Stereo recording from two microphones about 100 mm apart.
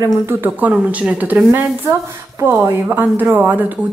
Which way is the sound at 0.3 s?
20° right (ahead or behind).